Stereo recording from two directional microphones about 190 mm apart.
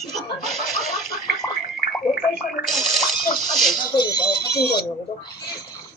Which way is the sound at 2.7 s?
Centre (ahead or behind).